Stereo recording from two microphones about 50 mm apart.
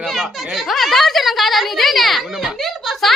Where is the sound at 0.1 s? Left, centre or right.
Centre.